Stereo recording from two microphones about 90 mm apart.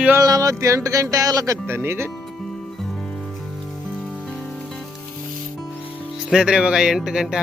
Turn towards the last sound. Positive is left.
turn(degrees=-5)  # may be behind; listen again after turning